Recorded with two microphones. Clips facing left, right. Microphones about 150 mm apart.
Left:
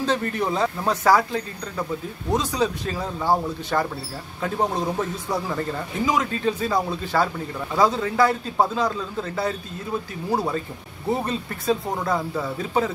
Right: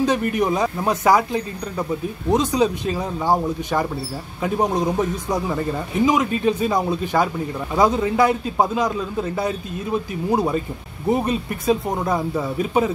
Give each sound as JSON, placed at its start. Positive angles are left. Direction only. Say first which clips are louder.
{"t": 0.0, "sound": "a man's voice", "louder": "right 4 dB", "side_deg": -15}